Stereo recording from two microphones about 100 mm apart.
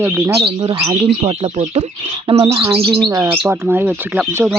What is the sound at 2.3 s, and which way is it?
Bird, 65° right (ahead or behind).